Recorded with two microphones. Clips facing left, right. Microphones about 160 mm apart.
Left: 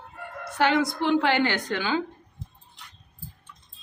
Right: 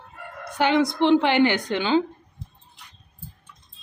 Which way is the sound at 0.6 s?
20° right (ahead or behind).